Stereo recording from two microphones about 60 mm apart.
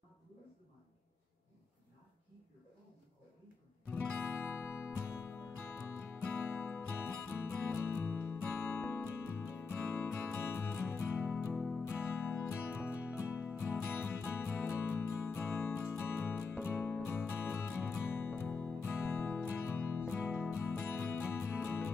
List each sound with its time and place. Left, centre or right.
3.9 s music: left
11.5 s music: centre
11.9 s music: left